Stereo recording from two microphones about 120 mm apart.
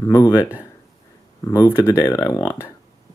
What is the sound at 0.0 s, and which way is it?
Speech, 20° left (ahead or behind).